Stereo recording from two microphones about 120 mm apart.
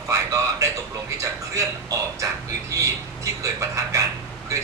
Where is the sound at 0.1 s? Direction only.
25° right (ahead or behind).